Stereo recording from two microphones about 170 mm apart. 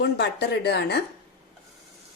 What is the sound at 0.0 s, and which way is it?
Speech, 75° left (ahead or behind).